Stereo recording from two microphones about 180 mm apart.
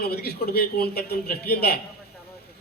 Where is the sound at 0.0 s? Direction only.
60° left (ahead or behind).